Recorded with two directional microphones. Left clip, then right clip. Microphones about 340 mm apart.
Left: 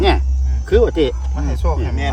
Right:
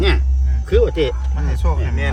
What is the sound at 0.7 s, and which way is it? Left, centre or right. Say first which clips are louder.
Speech: left 2 dB; left.